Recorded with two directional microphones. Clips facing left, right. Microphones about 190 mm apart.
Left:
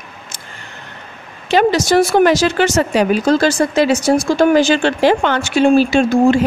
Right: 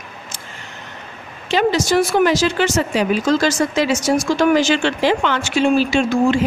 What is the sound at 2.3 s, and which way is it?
Speech, 70° left (ahead or behind).